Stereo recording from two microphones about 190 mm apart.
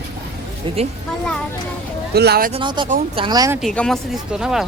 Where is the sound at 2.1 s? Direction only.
55° right (ahead or behind).